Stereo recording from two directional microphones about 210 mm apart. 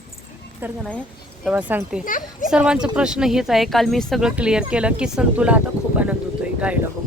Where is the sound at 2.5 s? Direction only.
5° right (ahead or behind).